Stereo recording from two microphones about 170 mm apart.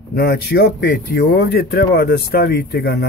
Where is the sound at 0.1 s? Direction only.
70° left (ahead or behind).